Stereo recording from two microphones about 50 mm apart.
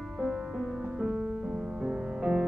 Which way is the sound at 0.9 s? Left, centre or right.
Centre.